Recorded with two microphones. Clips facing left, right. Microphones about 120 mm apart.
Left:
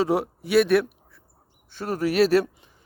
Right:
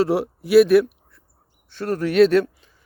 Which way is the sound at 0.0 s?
Centre (ahead or behind).